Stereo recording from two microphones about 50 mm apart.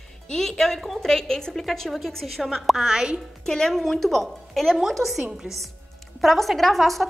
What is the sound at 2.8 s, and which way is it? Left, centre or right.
Speech, centre.